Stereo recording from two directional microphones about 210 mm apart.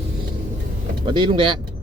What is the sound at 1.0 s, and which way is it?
Speech, 20° right (ahead or behind).